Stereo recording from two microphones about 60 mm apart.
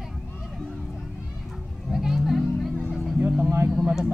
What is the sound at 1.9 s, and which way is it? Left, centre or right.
Music, centre.